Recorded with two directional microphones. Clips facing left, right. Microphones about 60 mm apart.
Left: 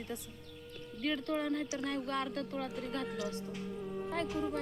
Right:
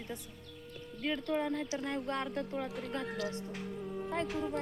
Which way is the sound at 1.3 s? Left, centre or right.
Centre.